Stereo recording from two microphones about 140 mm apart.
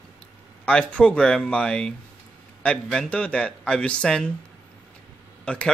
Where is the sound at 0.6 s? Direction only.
10° left (ahead or behind).